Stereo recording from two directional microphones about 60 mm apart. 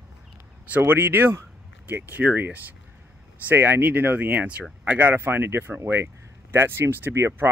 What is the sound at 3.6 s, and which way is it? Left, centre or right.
Speech, right.